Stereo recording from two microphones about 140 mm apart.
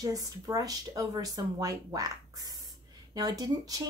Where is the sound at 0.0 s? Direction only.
25° right (ahead or behind).